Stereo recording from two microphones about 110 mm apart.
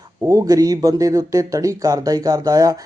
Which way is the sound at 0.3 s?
35° right (ahead or behind).